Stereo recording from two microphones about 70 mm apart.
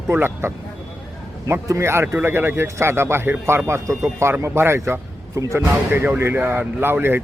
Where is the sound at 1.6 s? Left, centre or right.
Right.